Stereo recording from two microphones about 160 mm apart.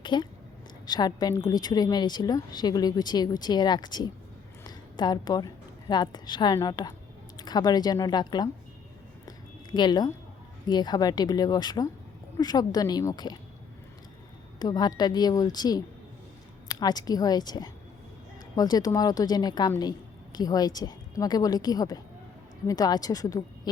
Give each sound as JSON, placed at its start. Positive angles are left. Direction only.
{"t": 0.0, "sound": "a woman's voice", "side_deg": 30}
{"t": 4.6, "sound": "a sound", "side_deg": 25}
{"t": 5.9, "sound": "a woman's voice", "side_deg": 25}
{"t": 9.7, "sound": "a woman's voice", "side_deg": 25}
{"t": 14.6, "sound": "a woman's voice", "side_deg": 25}